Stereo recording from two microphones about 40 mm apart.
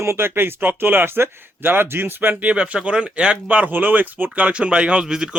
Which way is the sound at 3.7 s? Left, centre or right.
Right.